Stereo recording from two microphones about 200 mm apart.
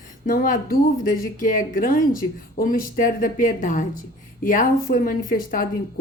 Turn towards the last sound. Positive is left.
turn(degrees=45)  # may be behind; listen again after turning